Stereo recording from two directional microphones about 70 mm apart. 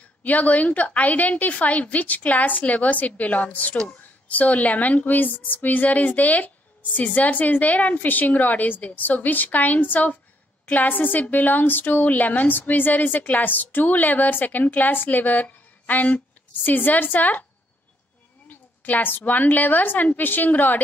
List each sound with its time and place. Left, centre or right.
0.2 s a woman's voice: left
18.5 s a woman's voice: left